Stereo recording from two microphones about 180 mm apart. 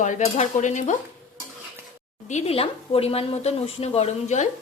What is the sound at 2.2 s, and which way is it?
Speech, 35° left (ahead or behind).